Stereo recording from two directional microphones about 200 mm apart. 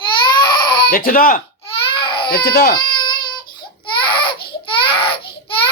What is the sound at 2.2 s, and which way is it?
Speech, 50° left (ahead or behind).